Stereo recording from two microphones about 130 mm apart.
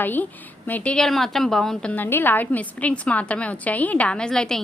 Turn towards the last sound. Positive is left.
turn(degrees=5)  # may be behind; listen again after turning